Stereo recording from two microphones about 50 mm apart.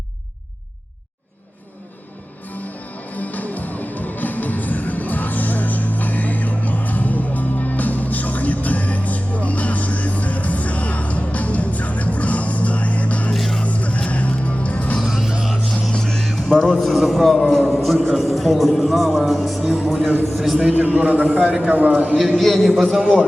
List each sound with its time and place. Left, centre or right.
3.1 s music: left
13.3 s music: centre
13.7 s music: left
15.0 s music: centre
15.9 s music: centre
16.5 s music: centre
16.9 s a man's voice: centre
20.7 s a man's voice: right
22.3 s a man's voice: centre